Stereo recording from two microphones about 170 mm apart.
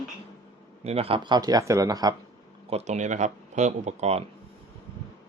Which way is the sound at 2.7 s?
40° right (ahead or behind).